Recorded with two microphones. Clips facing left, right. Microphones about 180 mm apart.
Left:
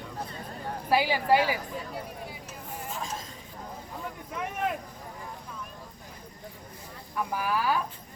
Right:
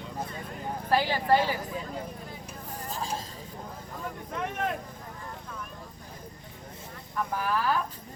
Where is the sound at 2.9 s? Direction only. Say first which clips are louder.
Right 3 dB; 35° right (ahead or behind).